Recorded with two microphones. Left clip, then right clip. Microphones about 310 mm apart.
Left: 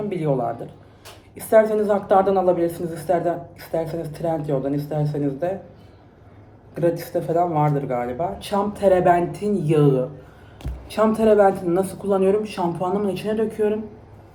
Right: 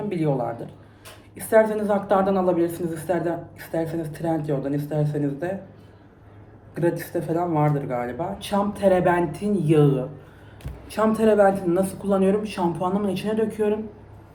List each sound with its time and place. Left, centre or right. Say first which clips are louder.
0.1 s a woman's voice: left 1 dB; centre
6.7 s a woman's voice: left 3 dB; centre